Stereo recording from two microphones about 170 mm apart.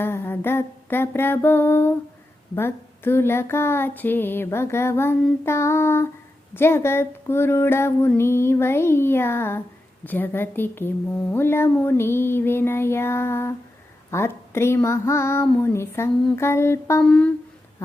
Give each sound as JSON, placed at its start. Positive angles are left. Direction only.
{"t": 0.0, "sound": "a woman's voice", "side_deg": 15}